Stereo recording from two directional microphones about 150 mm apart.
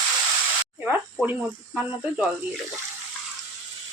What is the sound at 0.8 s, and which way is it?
Speech, 10° right (ahead or behind).